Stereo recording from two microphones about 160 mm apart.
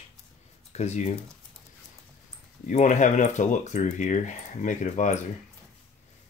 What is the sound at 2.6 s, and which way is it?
Speech, 50° left (ahead or behind).